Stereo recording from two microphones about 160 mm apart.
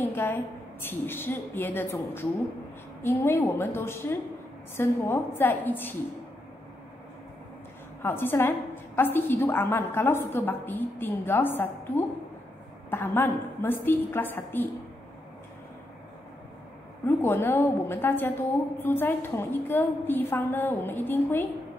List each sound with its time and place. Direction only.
0.0 s a woman's voice: 10° left (ahead or behind)
8.0 s a woman's voice: 15° left (ahead or behind)
17.0 s a woman's voice: 15° left (ahead or behind)